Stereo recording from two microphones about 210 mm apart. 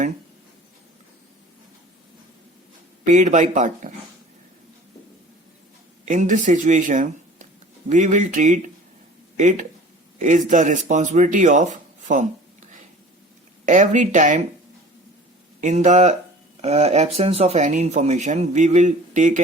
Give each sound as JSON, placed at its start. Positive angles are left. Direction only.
{"t": 3.1, "sound": "a man's voice", "side_deg": -35}
{"t": 6.1, "sound": "a man's voice", "side_deg": -35}
{"t": 13.7, "sound": "a man's voice", "side_deg": -35}
{"t": 15.6, "sound": "a man's voice", "side_deg": -35}